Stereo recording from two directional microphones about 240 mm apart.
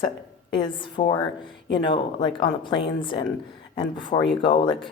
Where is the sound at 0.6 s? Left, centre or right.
Centre.